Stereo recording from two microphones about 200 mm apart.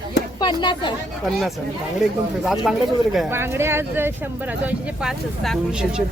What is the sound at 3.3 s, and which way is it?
Speech, 10° right (ahead or behind).